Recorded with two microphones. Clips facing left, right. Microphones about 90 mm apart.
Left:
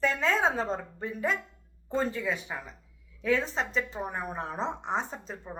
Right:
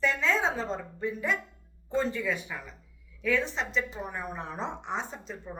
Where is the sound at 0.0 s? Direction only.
45° left (ahead or behind).